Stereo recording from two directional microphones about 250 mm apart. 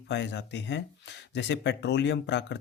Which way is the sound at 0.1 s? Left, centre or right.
Left.